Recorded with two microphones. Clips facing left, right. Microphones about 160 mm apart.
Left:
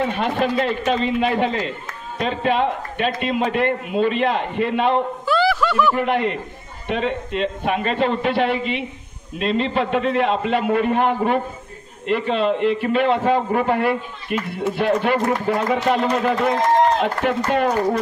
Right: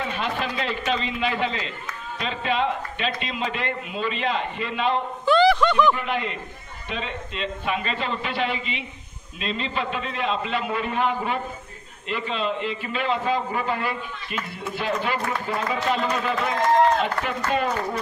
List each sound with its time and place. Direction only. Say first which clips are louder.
0.0 s a man's voice: left 7 dB; 50° left (ahead or behind)
5.2 s a sound: right 5 dB; 5° left (ahead or behind)
5.9 s a man's voice: left 8 dB; 60° left (ahead or behind)
16.1 s speech: left 6 dB; 50° left (ahead or behind)
17.0 s a man's voice: left 5 dB; 60° left (ahead or behind)